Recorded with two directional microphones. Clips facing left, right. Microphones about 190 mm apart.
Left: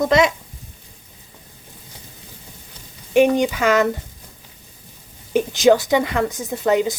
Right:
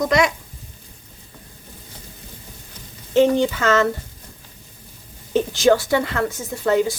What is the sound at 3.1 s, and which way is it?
Speech, 15° left (ahead or behind).